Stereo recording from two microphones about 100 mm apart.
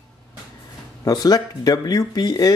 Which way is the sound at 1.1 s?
40° left (ahead or behind).